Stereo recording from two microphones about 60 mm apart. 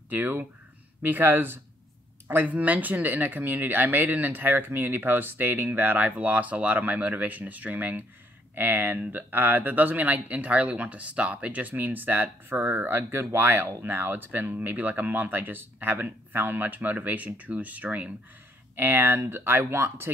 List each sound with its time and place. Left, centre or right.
0.1 s speech: right